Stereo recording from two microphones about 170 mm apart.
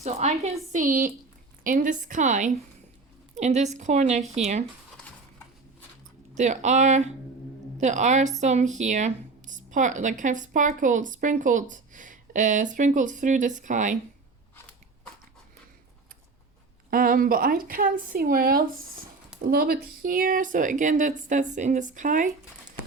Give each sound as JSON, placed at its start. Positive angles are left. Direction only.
{"t": 0.0, "sound": "speech", "side_deg": -40}
{"t": 6.3, "sound": "speech", "side_deg": -45}
{"t": 16.9, "sound": "a woman's voice", "side_deg": -60}